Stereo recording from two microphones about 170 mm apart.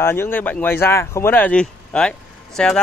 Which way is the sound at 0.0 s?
15° left (ahead or behind).